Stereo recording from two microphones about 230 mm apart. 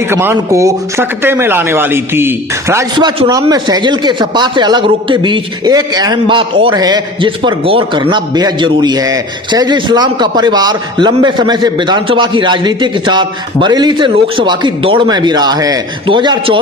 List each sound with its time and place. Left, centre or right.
0.1 s speech: centre